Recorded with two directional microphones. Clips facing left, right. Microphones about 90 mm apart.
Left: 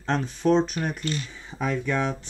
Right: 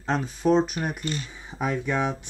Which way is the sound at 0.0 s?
5° right (ahead or behind).